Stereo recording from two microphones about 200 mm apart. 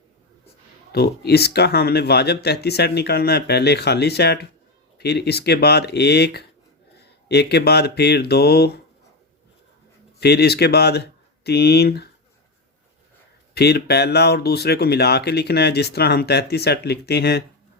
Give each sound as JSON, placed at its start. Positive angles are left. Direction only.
{"t": 0.9, "sound": "speech", "side_deg": 55}
{"t": 10.2, "sound": "speech", "side_deg": 55}
{"t": 13.5, "sound": "speech", "side_deg": 55}